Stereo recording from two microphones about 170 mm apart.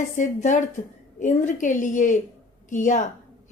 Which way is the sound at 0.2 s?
45° left (ahead or behind).